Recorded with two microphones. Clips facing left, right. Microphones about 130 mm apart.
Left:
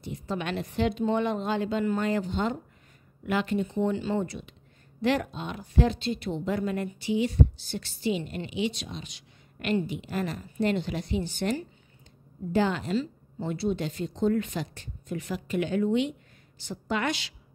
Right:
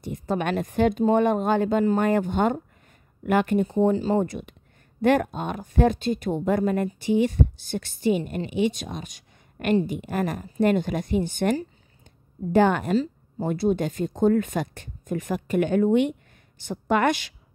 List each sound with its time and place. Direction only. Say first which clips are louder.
0.1 s a woman's voice: right 6 dB; 50° right (ahead or behind)
12.9 s speech: right 5 dB; 40° right (ahead or behind)